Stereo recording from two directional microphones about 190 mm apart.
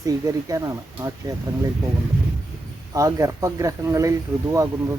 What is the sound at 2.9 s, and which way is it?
Speech, 15° right (ahead or behind).